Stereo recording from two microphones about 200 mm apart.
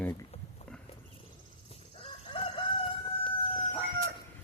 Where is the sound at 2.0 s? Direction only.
25° left (ahead or behind).